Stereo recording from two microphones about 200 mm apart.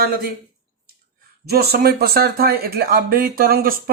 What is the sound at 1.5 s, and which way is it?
Speech, 55° right (ahead or behind).